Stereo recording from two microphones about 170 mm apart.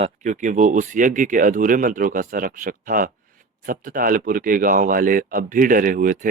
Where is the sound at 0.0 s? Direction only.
45° right (ahead or behind).